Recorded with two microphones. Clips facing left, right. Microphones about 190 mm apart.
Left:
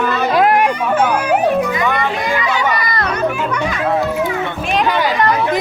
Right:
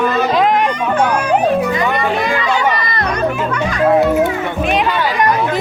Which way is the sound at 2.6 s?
25° right (ahead or behind).